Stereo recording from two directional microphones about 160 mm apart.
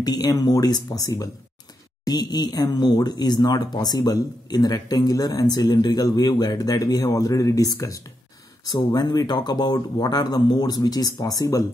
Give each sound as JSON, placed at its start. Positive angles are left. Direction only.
{"t": 0.0, "sound": "speech", "side_deg": 25}